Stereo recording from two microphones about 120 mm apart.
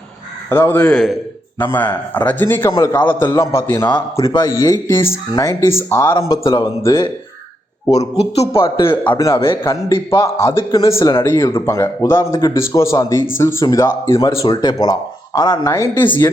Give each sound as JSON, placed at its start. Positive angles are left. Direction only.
{"t": 0.5, "sound": "a man's voice", "side_deg": 15}
{"t": 0.9, "sound": "a man's voice", "side_deg": 5}
{"t": 1.5, "sound": "a man's voice", "side_deg": 15}
{"t": 7.9, "sound": "speech", "side_deg": 60}
{"t": 9.1, "sound": "a man's voice", "side_deg": 25}
{"t": 14.5, "sound": "speech", "side_deg": 35}
{"t": 15.7, "sound": "a man's voice", "side_deg": 25}
{"t": 16.0, "sound": "speech", "side_deg": 40}